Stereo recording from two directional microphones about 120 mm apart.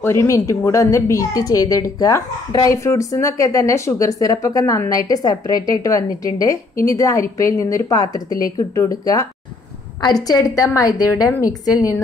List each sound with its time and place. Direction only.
0.0 s a woman's voice: 20° left (ahead or behind)